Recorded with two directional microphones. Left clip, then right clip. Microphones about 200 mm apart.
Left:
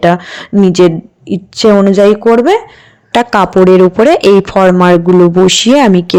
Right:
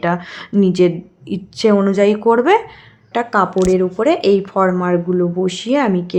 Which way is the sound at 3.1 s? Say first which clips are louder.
Left 7 dB; 40° left (ahead or behind).